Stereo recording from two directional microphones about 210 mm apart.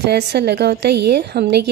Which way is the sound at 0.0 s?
50° right (ahead or behind).